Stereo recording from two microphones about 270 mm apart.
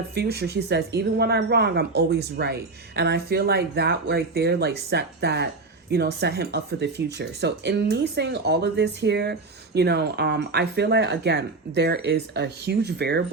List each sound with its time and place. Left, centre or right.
0.1 s speech: right